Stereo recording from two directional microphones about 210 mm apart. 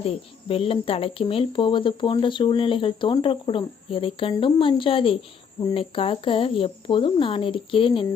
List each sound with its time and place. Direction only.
0.0 s speech: 30° left (ahead or behind)